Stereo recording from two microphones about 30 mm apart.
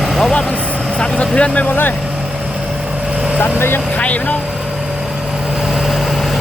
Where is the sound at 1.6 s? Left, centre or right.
Left.